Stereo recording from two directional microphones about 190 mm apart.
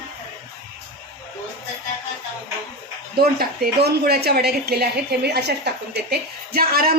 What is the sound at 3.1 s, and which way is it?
A woman's voice, 55° right (ahead or behind).